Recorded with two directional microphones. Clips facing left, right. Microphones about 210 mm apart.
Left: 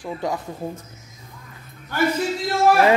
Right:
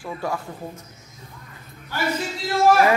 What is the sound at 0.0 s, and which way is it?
Speech, 20° left (ahead or behind).